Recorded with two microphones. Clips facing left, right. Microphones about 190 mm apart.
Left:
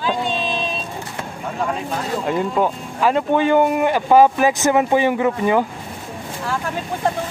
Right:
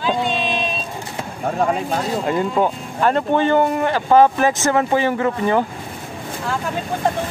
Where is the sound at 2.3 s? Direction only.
Centre (ahead or behind).